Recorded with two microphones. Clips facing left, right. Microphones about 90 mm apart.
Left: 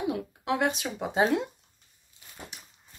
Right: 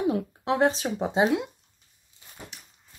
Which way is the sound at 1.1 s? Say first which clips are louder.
Right 1 dB; 10° right (ahead or behind).